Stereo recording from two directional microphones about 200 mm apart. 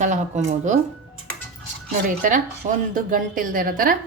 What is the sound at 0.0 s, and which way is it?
Speech, 35° right (ahead or behind).